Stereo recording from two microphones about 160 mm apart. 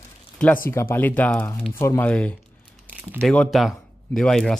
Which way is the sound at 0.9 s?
10° left (ahead or behind).